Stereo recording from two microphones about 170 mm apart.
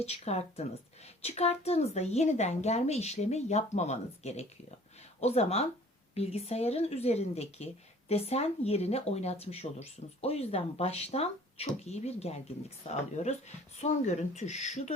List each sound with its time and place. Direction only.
0.0 s a woman's voice: 40° left (ahead or behind)